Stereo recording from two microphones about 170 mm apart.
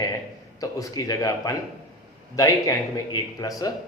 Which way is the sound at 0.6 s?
20° left (ahead or behind).